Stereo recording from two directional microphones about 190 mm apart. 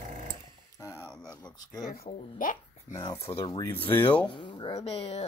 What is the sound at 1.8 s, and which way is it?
Speech, 50° left (ahead or behind).